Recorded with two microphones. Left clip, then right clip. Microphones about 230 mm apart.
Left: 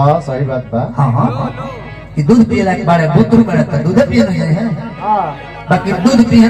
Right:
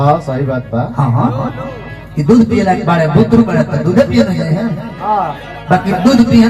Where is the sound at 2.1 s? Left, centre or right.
Left.